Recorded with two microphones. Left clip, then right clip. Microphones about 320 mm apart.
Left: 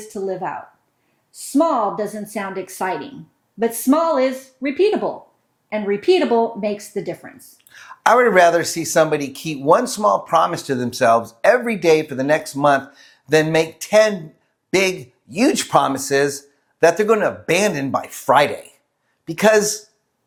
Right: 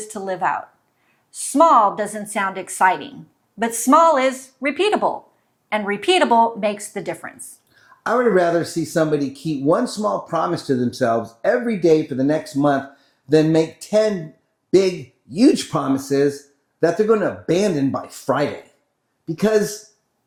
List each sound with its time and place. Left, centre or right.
0.1 s speech: right
1.5 s speech: right
8.0 s speech: left
16.8 s speech: left
19.4 s speech: left